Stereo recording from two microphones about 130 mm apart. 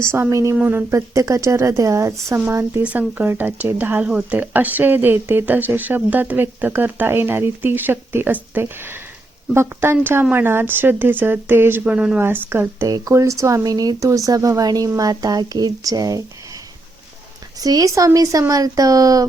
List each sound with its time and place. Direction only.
0.0 s speech: 20° right (ahead or behind)
17.6 s speech: 30° right (ahead or behind)